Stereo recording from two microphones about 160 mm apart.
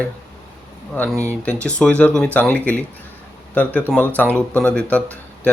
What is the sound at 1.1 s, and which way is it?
Speech, 15° right (ahead or behind).